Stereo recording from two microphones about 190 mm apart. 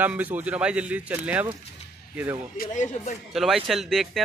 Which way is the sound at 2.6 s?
40° left (ahead or behind).